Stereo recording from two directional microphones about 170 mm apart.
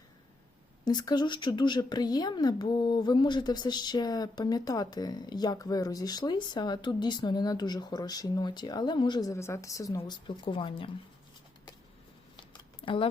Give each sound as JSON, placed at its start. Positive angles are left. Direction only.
{"t": 0.9, "sound": "a woman's voice", "side_deg": 25}
{"t": 10.0, "sound": "a woman's voice", "side_deg": 30}
{"t": 12.4, "sound": "a sound", "side_deg": 30}